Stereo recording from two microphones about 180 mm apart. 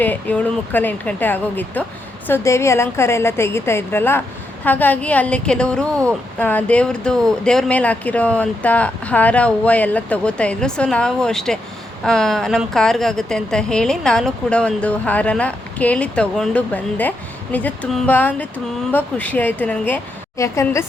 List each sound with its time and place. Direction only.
0.0 s speech: 10° left (ahead or behind)